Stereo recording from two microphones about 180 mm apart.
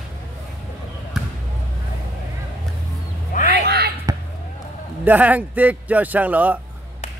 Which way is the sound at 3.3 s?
50° left (ahead or behind).